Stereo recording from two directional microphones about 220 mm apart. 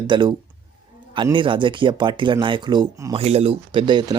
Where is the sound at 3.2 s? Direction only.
25° right (ahead or behind).